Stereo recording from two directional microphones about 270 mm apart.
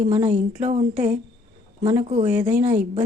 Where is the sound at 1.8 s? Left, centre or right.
Centre.